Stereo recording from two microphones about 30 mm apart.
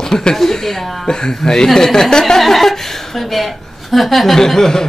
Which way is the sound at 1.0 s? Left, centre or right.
Left.